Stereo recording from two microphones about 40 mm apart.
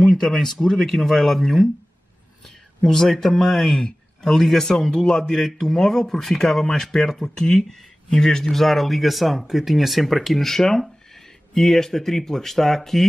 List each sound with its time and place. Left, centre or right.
0.0 s a man's voice: centre